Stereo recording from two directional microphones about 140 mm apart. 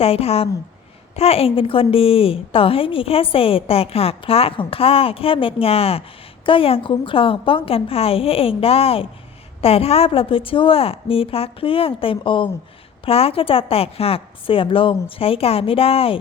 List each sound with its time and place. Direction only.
0.0 s a woman's voice: 45° left (ahead or behind)